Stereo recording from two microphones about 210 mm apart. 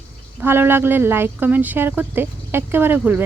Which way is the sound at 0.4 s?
10° right (ahead or behind).